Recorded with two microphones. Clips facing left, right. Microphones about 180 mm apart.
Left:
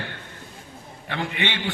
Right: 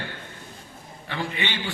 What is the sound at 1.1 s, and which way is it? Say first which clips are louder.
Speech: left 2 dB; 65° left (ahead or behind).